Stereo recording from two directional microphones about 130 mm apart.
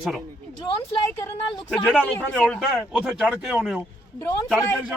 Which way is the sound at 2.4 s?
Centre (ahead or behind).